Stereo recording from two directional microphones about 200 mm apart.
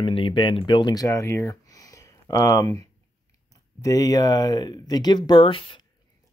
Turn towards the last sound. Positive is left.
turn(degrees=25)  # may be behind; listen again after turning